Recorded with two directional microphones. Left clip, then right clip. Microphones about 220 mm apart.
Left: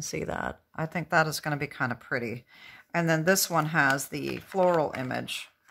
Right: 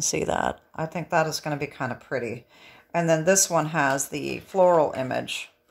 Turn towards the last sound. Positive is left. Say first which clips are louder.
# right 5 dB
turn(degrees=15)  # may be behind; listen again after turning